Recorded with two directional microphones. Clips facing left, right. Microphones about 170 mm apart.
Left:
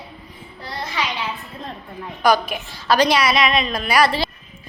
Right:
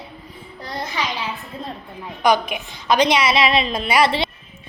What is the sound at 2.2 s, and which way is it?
A woman's voice, 20° right (ahead or behind).